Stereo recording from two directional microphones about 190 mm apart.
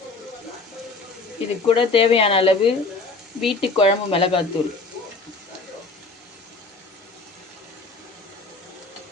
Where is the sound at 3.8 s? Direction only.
30° left (ahead or behind).